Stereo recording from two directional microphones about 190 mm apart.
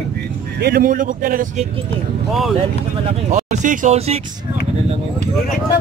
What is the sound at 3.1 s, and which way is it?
Speech, 40° right (ahead or behind).